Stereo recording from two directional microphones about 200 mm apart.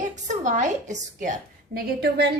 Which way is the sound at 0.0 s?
40° right (ahead or behind).